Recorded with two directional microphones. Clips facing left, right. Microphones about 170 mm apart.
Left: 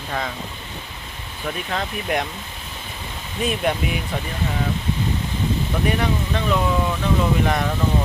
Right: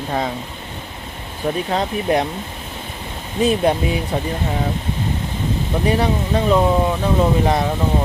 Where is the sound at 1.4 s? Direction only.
35° right (ahead or behind).